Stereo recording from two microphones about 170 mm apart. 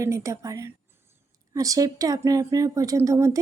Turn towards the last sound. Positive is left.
turn(degrees=-20)  # may be behind; listen again after turning